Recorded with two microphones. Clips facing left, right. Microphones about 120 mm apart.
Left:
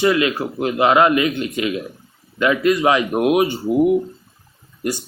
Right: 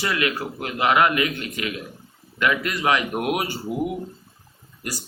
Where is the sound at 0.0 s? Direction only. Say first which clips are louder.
Left 8 dB; 25° left (ahead or behind).